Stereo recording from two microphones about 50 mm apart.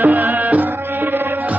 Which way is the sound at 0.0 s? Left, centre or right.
Right.